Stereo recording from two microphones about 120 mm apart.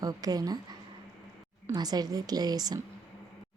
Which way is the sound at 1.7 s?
35° right (ahead or behind).